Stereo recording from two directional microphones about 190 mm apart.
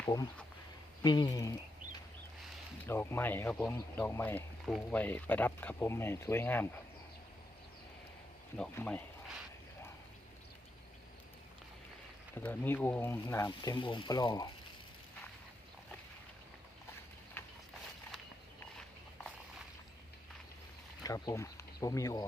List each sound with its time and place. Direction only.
0.0 s speech: 20° left (ahead or behind)
2.8 s speech: 10° left (ahead or behind)
8.5 s speech: 5° left (ahead or behind)
12.3 s speech: 10° left (ahead or behind)
13.7 s speech: 25° left (ahead or behind)
21.0 s speech: 20° left (ahead or behind)